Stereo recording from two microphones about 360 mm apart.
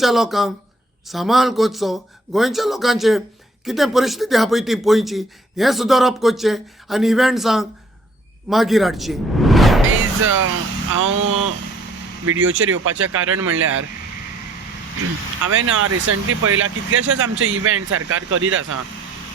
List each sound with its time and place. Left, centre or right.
0.0 s speech: centre
10.2 s speech: right
15.4 s speech: right